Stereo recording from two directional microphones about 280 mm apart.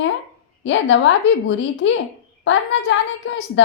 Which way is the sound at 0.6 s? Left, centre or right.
Left.